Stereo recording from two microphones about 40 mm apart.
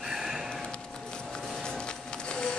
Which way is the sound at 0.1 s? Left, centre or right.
Centre.